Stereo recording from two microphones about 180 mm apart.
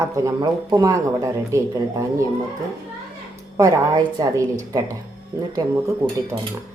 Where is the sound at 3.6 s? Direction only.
20° right (ahead or behind).